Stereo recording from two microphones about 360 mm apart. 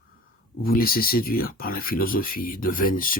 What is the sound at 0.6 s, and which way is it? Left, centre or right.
Speech, left.